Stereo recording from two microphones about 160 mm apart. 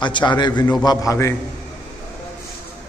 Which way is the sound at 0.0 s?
30° left (ahead or behind).